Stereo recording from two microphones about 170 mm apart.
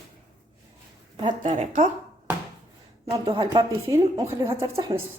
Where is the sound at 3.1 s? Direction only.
25° right (ahead or behind).